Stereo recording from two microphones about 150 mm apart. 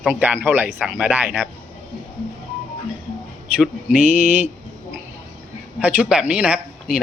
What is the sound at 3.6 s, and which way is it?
Speech, 10° right (ahead or behind).